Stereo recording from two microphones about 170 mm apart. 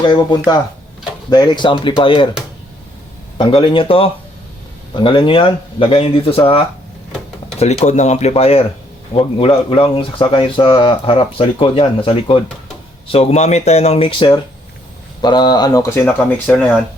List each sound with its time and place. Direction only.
0.0 s speech: 25° left (ahead or behind)
3.3 s speech: 30° left (ahead or behind)
7.6 s speech: 40° left (ahead or behind); by 15.9 s 20° left (ahead or behind)
16.0 s speech: 10° left (ahead or behind)